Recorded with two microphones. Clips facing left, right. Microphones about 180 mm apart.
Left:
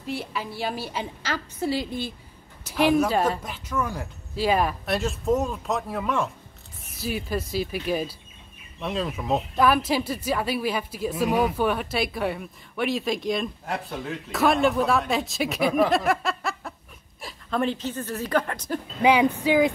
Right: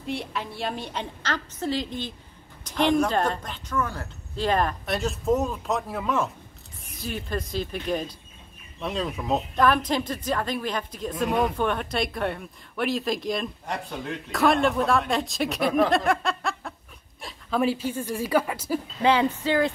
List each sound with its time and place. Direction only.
0.0 s a woman's voice: centre (ahead or behind)
18.9 s a woman's voice: 15° left (ahead or behind)